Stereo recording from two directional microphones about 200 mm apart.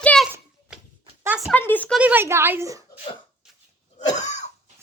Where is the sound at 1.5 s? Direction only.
10° left (ahead or behind).